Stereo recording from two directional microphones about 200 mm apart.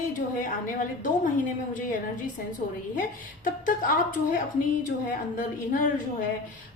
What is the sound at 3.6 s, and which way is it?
A woman's voice, 40° left (ahead or behind).